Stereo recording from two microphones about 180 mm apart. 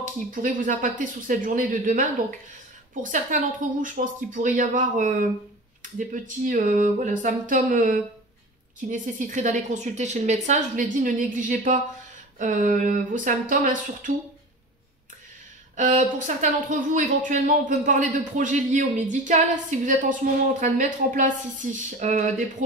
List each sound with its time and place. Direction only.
0.0 s a woman's voice: 45° right (ahead or behind)
15.7 s a woman's voice: 45° right (ahead or behind)